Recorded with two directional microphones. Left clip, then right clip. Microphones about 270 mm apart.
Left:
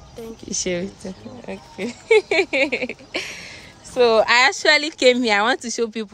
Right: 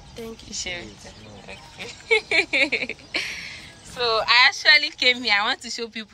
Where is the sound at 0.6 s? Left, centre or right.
Left; by 3.3 s centre.